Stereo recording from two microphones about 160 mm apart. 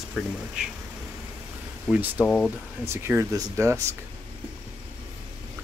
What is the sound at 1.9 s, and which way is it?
Speech, 10° right (ahead or behind).